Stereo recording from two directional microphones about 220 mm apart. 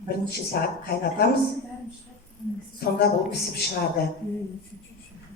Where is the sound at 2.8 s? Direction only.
45° left (ahead or behind).